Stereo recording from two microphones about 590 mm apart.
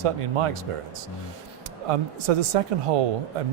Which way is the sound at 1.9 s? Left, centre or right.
Right.